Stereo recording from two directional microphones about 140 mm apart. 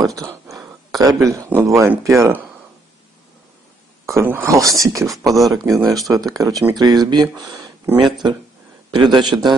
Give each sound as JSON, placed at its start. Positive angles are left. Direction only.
{"t": 0.9, "sound": "speech", "side_deg": -25}
{"t": 4.0, "sound": "a man's voice", "side_deg": -20}